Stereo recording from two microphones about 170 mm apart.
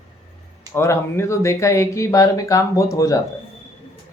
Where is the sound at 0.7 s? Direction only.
15° left (ahead or behind).